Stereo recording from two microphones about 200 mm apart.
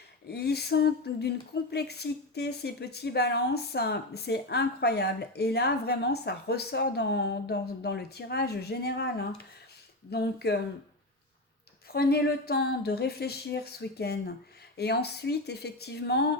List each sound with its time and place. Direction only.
0.3 s speech: 55° left (ahead or behind)
11.9 s speech: 50° left (ahead or behind)